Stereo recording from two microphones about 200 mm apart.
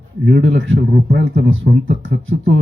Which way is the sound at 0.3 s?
60° right (ahead or behind).